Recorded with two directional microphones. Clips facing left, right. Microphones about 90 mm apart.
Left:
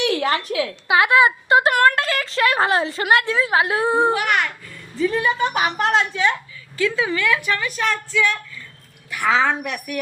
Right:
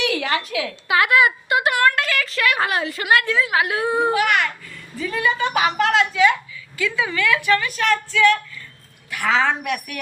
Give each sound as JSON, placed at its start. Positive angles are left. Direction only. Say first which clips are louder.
{"t": 0.0, "sound": "a woman's voice", "louder": "left 2 dB", "side_deg": 35}
{"t": 0.9, "sound": "a woman's voice", "louder": "left 2 dB", "side_deg": 25}
{"t": 1.7, "sound": "a sound", "louder": "left 2 dB", "side_deg": 45}
{"t": 2.0, "sound": "a woman's voice", "louder": "left 2 dB", "side_deg": 30}
{"t": 7.6, "sound": "speech", "louder": "right 2 dB", "side_deg": 10}